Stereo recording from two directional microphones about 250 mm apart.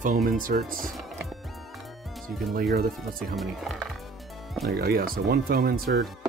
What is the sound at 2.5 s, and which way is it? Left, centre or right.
Speech, right.